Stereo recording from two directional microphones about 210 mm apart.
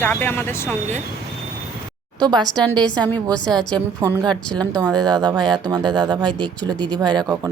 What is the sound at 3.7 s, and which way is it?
Speech, 15° right (ahead or behind).